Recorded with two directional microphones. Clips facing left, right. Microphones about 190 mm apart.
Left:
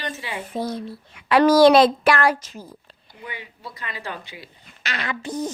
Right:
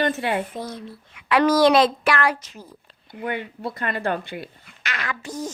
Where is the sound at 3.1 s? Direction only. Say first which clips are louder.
Right 9 dB; 55° right (ahead or behind).